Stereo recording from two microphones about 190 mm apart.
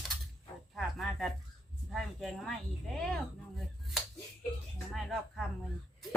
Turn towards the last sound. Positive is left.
turn(degrees=0)  # may be behind; listen again after turning